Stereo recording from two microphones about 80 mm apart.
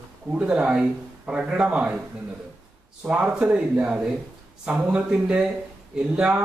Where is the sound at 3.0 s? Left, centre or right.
Centre.